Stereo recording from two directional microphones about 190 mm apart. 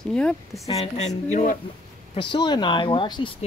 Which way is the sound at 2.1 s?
25° left (ahead or behind).